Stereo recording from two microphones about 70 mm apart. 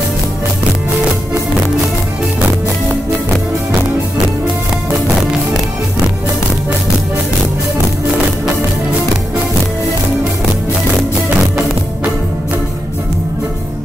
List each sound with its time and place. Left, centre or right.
11.2 s music: right